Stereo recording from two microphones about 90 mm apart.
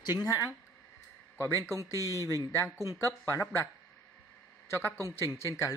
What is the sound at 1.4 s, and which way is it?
A man's voice, 35° left (ahead or behind).